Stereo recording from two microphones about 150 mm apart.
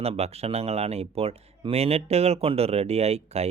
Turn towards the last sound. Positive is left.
turn(degrees=-45)  # may be behind; listen again after turning